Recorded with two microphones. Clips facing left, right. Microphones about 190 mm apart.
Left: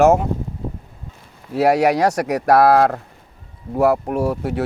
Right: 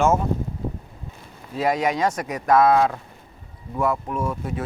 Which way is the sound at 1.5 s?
70° left (ahead or behind).